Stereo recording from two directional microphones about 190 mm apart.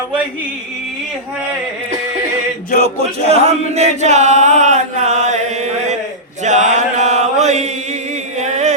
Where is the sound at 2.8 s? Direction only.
35° right (ahead or behind).